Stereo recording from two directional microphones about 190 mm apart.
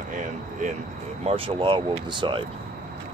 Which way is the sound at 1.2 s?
30° right (ahead or behind).